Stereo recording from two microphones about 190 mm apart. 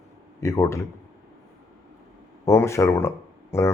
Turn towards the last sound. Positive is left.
turn(degrees=15)  # may be behind; listen again after turning